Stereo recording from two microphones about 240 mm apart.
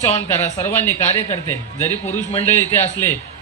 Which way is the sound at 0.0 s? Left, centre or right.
Centre.